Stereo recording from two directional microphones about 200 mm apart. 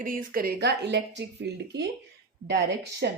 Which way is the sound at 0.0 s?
45° right (ahead or behind).